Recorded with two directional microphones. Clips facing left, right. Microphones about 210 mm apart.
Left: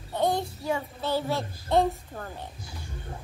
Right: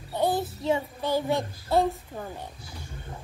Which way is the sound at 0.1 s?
5° right (ahead or behind).